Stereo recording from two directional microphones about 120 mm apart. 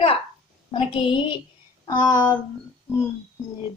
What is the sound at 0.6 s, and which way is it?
Speech, 50° left (ahead or behind).